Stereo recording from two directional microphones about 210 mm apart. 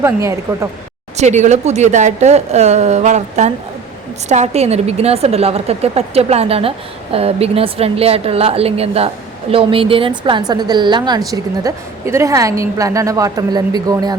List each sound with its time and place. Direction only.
0.0 s a woman's voice: 15° right (ahead or behind)
1.1 s a woman's voice: 35° right (ahead or behind)